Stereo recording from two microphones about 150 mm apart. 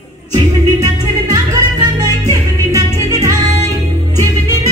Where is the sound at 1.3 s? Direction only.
25° right (ahead or behind).